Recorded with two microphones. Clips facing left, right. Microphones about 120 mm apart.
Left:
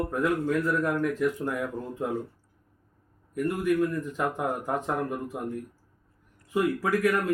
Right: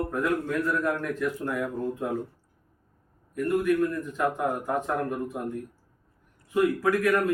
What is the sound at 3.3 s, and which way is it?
Speech, 15° left (ahead or behind).